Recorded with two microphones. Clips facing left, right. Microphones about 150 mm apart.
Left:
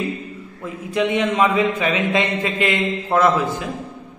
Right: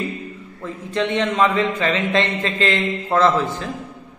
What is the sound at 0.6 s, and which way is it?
A man's voice, 10° left (ahead or behind).